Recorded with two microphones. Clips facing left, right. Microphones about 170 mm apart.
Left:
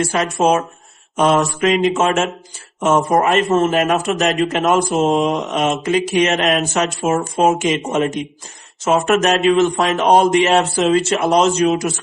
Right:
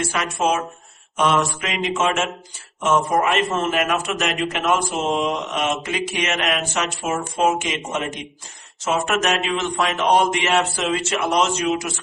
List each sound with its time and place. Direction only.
0.0 s speech: 35° left (ahead or behind)